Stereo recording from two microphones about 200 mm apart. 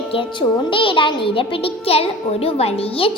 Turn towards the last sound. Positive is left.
turn(degrees=25)  # may be behind; listen again after turning